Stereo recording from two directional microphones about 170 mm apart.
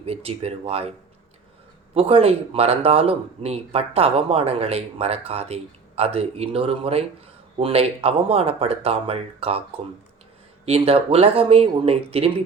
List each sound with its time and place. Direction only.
0.0 s speech: 35° right (ahead or behind)
10.7 s speech: 35° right (ahead or behind)